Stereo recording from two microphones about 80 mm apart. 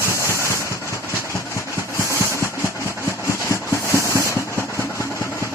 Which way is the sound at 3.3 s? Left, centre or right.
Left.